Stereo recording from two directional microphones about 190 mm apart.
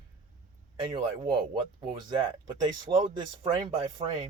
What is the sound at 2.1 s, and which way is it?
Speech, 25° right (ahead or behind).